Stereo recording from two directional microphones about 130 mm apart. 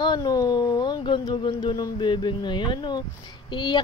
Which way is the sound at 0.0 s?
30° left (ahead or behind).